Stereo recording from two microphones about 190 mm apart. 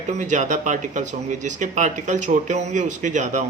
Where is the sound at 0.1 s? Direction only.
40° right (ahead or behind).